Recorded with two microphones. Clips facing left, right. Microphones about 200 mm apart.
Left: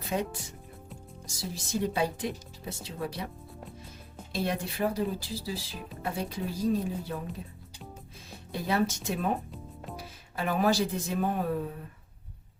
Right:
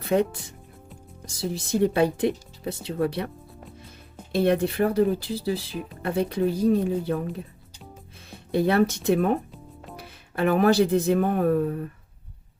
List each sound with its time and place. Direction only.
0.0 s speech: 60° right (ahead or behind)
4.3 s speech: 60° right (ahead or behind)
8.5 s speech: 60° right (ahead or behind)
9.5 s music: centre (ahead or behind)
10.0 s speech: 60° right (ahead or behind)